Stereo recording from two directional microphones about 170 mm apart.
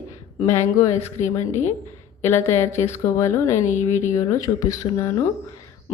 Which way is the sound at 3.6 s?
45° left (ahead or behind).